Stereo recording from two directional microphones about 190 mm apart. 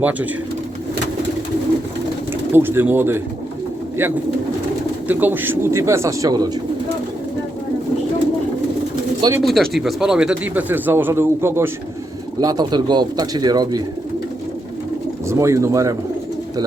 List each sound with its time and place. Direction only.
0.0 s speech: 10° right (ahead or behind)
2.5 s speech: 10° right (ahead or behind)
5.0 s speech: 10° right (ahead or behind)
9.4 s speech: centre (ahead or behind); by 13.8 s 20° right (ahead or behind)
15.3 s speech: 15° right (ahead or behind)